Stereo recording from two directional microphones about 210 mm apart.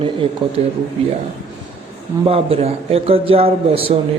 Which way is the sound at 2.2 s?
25° right (ahead or behind).